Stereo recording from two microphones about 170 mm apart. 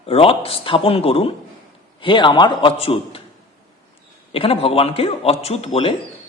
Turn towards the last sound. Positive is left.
turn(degrees=35)  # may be behind; listen again after turning